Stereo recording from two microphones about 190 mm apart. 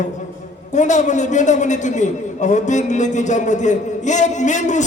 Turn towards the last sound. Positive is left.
turn(degrees=40)  # may be behind; listen again after turning